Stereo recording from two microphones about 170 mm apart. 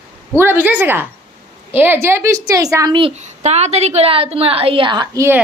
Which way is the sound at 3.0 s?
40° right (ahead or behind).